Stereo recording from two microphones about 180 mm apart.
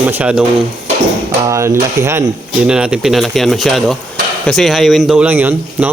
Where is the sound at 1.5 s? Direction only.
15° right (ahead or behind).